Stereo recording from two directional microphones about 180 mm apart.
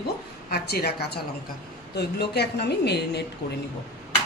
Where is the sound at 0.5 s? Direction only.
60° left (ahead or behind).